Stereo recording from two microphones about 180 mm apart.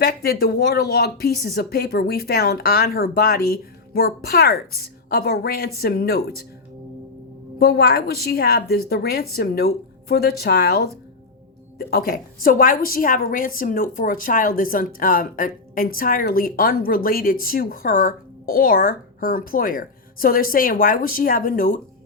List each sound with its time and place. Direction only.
0.0 s speech: 60° left (ahead or behind)
7.6 s a woman's voice: 60° left (ahead or behind)